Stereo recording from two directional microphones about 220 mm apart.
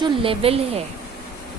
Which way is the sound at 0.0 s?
25° right (ahead or behind).